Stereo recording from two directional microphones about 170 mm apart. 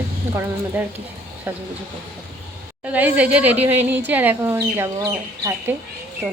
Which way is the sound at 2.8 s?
10° right (ahead or behind).